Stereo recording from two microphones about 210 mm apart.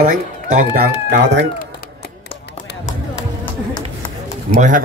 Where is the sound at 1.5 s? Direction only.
45° left (ahead or behind).